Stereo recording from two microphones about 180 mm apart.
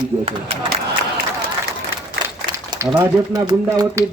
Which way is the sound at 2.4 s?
25° right (ahead or behind).